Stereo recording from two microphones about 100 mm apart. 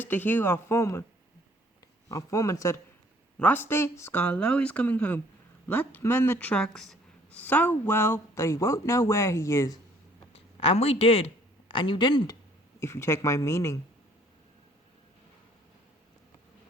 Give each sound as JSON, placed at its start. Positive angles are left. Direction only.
{"t": 0.0, "sound": "a woman's voice", "side_deg": 20}
{"t": 2.0, "sound": "speech", "side_deg": 35}
{"t": 3.3, "sound": "a woman's voice", "side_deg": 15}
{"t": 4.1, "sound": "a woman's voice", "side_deg": 15}
{"t": 6.5, "sound": "a woman's voice", "side_deg": 5}
{"t": 10.3, "sound": "a man's voice", "side_deg": 75}
{"t": 11.7, "sound": "speech", "side_deg": 55}
{"t": 12.8, "sound": "a woman's voice", "side_deg": 25}